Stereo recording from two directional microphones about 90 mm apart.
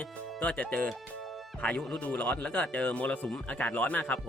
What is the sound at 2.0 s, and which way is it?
Speech, 15° left (ahead or behind).